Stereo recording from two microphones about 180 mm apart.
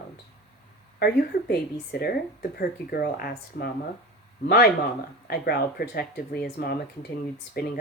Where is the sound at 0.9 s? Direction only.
60° left (ahead or behind).